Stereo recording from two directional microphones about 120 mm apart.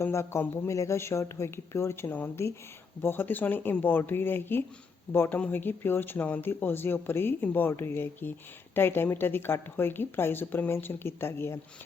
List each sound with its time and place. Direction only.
0.0 s speech: 20° left (ahead or behind)